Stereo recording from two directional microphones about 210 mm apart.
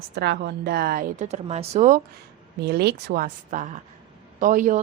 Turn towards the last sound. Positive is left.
turn(degrees=-40)  # may be behind; listen again after turning